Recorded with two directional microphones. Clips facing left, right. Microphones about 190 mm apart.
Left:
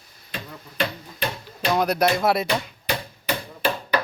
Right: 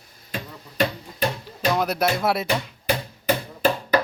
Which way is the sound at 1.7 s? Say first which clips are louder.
Left 4 dB; 5° right (ahead or behind).